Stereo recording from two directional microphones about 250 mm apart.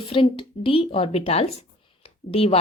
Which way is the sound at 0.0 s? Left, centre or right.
Left.